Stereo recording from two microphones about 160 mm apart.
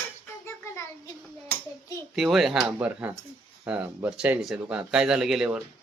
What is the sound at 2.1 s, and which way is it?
Speech, centre (ahead or behind).